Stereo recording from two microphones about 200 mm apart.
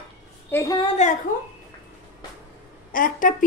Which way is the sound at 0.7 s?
30° left (ahead or behind).